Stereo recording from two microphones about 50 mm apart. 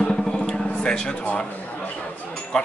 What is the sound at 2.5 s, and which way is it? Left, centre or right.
Speech, left.